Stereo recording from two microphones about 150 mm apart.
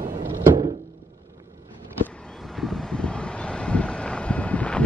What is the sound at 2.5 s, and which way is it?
Vehicle, 5° left (ahead or behind).